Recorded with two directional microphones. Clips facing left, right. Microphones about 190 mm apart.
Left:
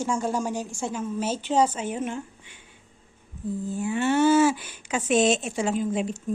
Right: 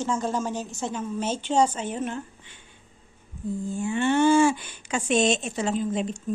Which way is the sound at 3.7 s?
5° left (ahead or behind).